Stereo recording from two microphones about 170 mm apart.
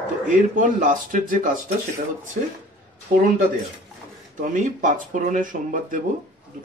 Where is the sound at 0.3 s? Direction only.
50° right (ahead or behind).